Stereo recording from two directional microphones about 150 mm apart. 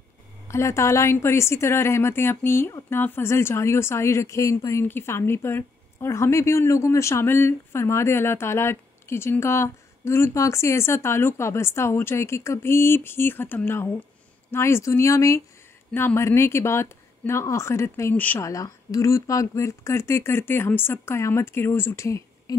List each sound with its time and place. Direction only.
0.5 s speech: 20° left (ahead or behind)